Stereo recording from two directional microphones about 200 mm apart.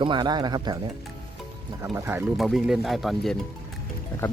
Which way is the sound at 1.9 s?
10° right (ahead or behind).